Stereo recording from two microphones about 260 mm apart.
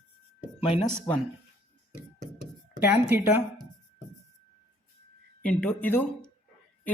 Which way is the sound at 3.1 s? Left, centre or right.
Centre.